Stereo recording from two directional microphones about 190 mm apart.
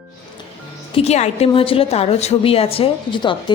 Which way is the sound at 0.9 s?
35° left (ahead or behind).